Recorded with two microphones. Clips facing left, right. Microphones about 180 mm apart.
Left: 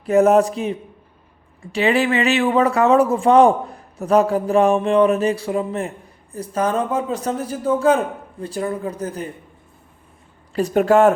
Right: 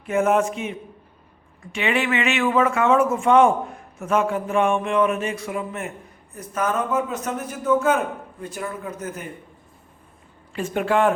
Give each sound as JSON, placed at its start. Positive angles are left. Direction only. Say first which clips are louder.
{"t": 0.0, "sound": "speech", "louder": "left 6 dB", "side_deg": 40}
{"t": 10.5, "sound": "speech", "louder": "left 7 dB", "side_deg": 40}